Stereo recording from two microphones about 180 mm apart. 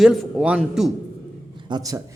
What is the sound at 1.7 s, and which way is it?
Speech, 20° right (ahead or behind).